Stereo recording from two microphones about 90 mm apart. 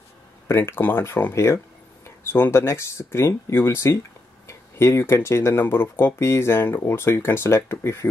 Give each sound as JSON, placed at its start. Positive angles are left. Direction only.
{"t": 0.5, "sound": "speech", "side_deg": 25}